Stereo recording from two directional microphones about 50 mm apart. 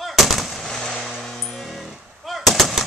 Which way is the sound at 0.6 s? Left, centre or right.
Centre.